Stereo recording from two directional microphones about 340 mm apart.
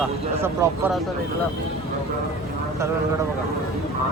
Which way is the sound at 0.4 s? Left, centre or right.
Centre.